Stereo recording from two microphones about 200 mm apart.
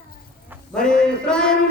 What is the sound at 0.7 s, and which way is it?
Speech, 5° left (ahead or behind).